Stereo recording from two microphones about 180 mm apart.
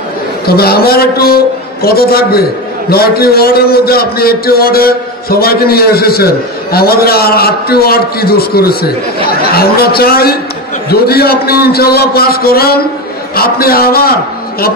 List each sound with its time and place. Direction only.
0.5 s a man's voice: 60° left (ahead or behind)